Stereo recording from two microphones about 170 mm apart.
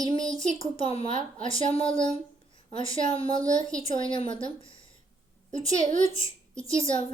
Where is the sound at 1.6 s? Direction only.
30° left (ahead or behind).